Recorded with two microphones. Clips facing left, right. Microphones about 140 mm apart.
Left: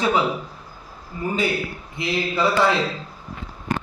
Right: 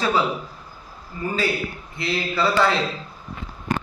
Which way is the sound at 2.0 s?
20° left (ahead or behind).